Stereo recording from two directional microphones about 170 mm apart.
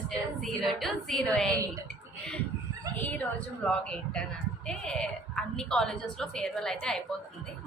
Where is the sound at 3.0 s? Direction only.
10° left (ahead or behind).